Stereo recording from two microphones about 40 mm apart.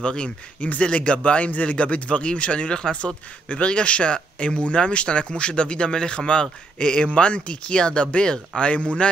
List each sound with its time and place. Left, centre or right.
0.0 s speech: left
0.6 s a man's voice: left